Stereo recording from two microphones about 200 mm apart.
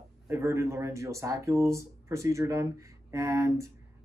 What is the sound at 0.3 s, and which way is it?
Speech, 15° right (ahead or behind).